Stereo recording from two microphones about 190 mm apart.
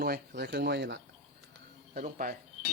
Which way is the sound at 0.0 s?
55° right (ahead or behind).